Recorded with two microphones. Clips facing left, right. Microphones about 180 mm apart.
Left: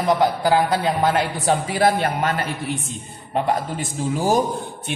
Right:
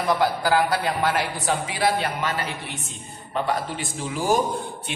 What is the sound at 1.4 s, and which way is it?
Speech, 45° left (ahead or behind).